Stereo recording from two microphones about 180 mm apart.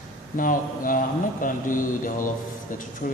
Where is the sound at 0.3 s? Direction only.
50° left (ahead or behind).